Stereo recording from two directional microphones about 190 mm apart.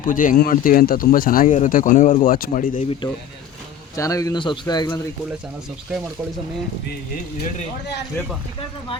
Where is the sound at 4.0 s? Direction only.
15° left (ahead or behind).